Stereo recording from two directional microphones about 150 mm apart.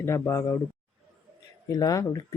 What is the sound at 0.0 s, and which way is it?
Speech, 20° left (ahead or behind).